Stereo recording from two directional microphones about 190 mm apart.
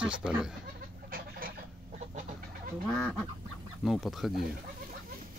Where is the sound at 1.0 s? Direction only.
50° right (ahead or behind).